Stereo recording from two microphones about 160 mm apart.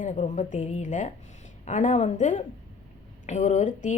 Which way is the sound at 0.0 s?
55° left (ahead or behind).